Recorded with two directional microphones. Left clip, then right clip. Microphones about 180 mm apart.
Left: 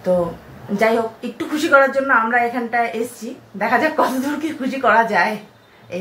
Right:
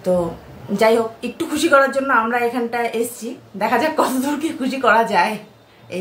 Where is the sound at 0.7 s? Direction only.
Centre (ahead or behind).